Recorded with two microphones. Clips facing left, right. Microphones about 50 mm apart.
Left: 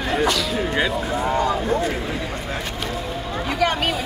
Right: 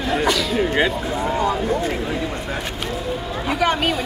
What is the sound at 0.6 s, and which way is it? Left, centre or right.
Speech, centre.